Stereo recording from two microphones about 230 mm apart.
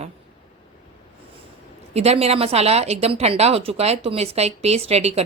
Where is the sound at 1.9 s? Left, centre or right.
Right.